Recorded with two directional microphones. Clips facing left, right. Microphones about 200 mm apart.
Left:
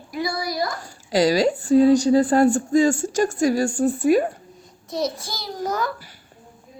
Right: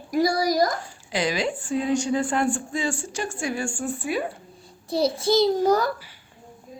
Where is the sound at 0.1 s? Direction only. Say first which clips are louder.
Right 5 dB; 40° right (ahead or behind).